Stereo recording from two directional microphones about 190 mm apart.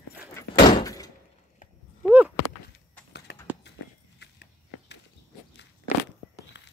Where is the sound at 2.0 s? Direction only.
10° right (ahead or behind).